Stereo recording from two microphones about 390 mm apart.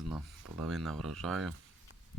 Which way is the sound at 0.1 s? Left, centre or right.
Centre.